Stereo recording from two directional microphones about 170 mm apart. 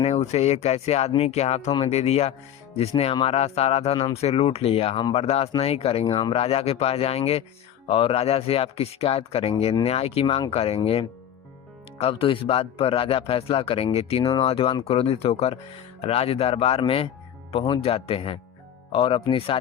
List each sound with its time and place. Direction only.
0.0 s speech: 40° left (ahead or behind)
11.9 s speech: 35° left (ahead or behind)